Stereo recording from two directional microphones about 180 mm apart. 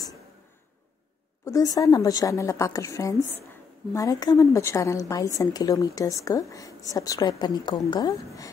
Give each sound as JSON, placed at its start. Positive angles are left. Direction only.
{"t": 1.4, "sound": "a woman's voice", "side_deg": 20}